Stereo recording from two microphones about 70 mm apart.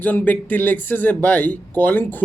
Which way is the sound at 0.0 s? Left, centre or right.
Left.